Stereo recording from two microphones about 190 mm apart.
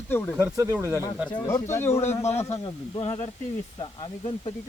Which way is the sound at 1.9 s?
35° left (ahead or behind).